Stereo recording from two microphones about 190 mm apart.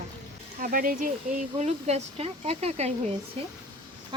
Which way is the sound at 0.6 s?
45° right (ahead or behind).